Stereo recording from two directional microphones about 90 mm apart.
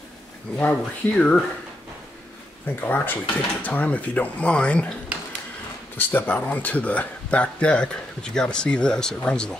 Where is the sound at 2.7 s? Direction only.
20° left (ahead or behind).